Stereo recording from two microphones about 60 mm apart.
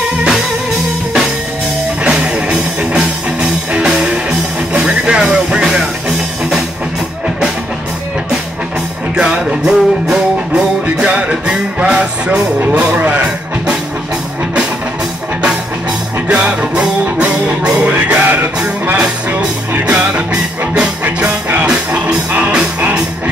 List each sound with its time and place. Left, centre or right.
2.0 s music: centre
9.1 s music: centre
16.3 s music: centre
19.7 s music: right